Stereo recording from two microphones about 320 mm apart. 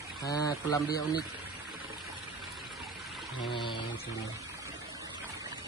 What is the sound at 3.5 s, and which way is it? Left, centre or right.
Speech, centre.